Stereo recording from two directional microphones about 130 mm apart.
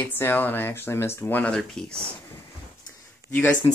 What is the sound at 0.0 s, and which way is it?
Speech, 15° left (ahead or behind).